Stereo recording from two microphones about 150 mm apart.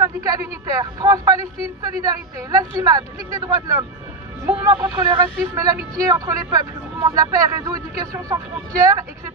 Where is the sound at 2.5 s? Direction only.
25° right (ahead or behind).